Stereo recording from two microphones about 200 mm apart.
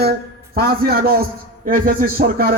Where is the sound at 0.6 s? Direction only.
50° right (ahead or behind).